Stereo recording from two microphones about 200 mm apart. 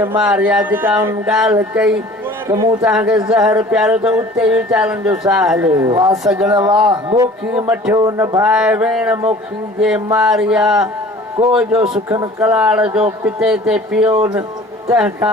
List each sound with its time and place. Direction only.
0.0 s speech: 10° right (ahead or behind)
2.9 s a man's voice: 5° right (ahead or behind)
8.4 s a man's voice: 5° right (ahead or behind)
10.2 s a man's voice: 5° right (ahead or behind)
11.8 s speech: 20° right (ahead or behind)
12.4 s a man's voice: 5° right (ahead or behind)
14.1 s speech: 15° right (ahead or behind)